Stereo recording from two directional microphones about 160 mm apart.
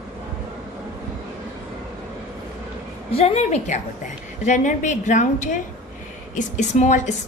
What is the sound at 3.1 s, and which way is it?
A woman's voice, 40° left (ahead or behind).